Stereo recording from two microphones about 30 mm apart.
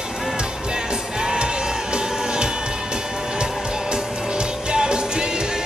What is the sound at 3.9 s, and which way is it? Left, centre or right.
Music, right.